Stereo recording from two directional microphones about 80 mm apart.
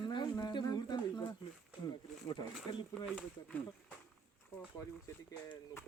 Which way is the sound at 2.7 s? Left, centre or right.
Left.